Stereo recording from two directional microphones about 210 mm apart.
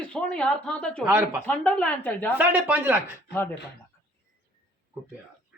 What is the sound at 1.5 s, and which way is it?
Speech, 5° left (ahead or behind).